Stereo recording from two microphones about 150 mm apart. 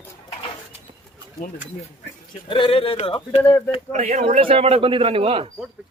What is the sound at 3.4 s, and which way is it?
Speech, 10° left (ahead or behind).